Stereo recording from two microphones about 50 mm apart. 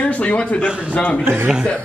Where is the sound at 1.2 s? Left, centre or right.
Right.